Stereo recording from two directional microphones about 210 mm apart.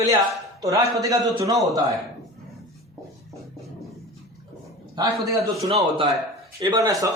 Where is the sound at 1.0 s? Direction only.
15° right (ahead or behind).